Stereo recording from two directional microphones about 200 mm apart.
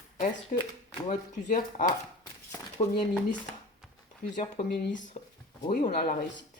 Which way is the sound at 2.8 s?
30° left (ahead or behind).